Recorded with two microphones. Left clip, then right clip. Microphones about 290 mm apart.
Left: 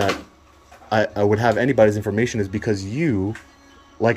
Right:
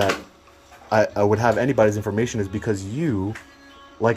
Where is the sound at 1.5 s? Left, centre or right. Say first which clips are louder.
Left 2 dB; left.